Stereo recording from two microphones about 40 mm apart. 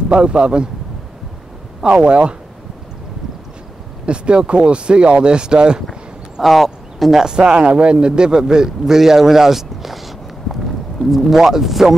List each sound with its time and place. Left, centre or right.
0.1 s speech: right
1.9 s speech: right
4.0 s speech: right
6.4 s speech: centre
7.1 s speech: centre
7.3 s a man's voice: right; by 11.9 s centre